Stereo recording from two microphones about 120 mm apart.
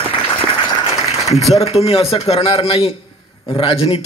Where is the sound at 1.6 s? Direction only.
55° left (ahead or behind).